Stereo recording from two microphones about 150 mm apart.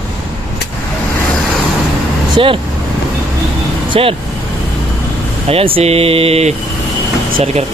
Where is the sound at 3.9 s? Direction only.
40° right (ahead or behind).